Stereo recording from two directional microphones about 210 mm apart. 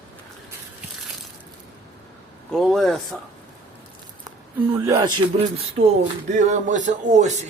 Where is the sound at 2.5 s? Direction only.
Centre (ahead or behind).